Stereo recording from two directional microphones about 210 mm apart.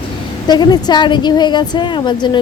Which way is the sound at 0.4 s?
20° left (ahead or behind).